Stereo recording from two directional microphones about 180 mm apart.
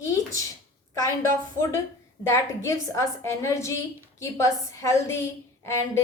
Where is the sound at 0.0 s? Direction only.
20° left (ahead or behind).